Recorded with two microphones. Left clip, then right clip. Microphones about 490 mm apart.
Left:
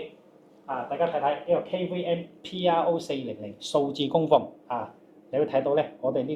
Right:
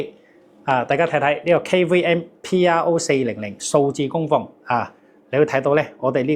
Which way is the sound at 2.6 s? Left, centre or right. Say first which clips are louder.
Right 6 dB; right.